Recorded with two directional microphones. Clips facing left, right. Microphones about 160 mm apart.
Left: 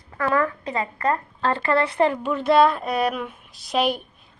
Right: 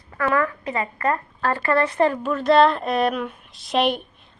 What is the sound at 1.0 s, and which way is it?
Speech, 20° left (ahead or behind).